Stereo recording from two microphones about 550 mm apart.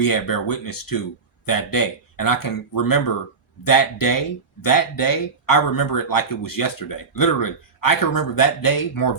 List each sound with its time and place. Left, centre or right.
0.0 s speech: left